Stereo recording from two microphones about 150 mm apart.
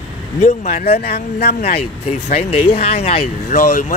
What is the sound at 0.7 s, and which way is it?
Speech, 85° left.